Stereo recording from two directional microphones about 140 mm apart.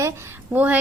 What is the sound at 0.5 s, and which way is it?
Speech, 10° right (ahead or behind).